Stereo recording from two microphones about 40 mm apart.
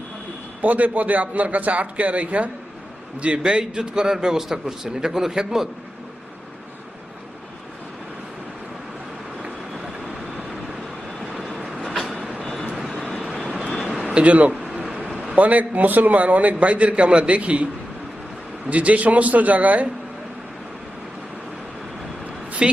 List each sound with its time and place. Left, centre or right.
0.6 s a man's voice: right
3.4 s a man's voice: centre
11.2 s vehicle: centre
14.1 s a man's voice: right
14.6 s a sound: right
15.1 s a sound: centre
15.4 s a man's voice: right
18.7 s a man's voice: right
22.6 s speech: right